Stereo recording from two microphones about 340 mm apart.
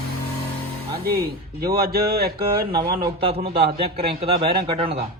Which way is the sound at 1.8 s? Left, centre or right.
Right.